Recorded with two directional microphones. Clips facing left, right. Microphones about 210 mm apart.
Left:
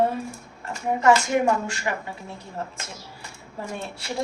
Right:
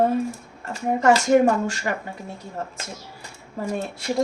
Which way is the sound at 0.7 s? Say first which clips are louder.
Right 1 dB; 40° right (ahead or behind).